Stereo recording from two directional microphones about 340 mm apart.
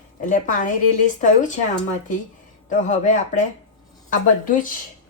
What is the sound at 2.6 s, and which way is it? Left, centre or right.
A woman's voice, left.